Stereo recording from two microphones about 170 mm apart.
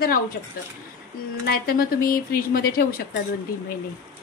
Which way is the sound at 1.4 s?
60° left (ahead or behind).